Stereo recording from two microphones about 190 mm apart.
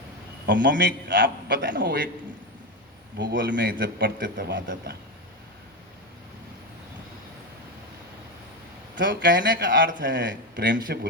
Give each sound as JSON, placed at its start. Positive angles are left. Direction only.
{"t": 0.4, "sound": "a man's voice", "side_deg": -65}
{"t": 3.2, "sound": "a man's voice", "side_deg": -65}
{"t": 3.6, "sound": "a man's voice", "side_deg": -50}
{"t": 9.0, "sound": "speech", "side_deg": -65}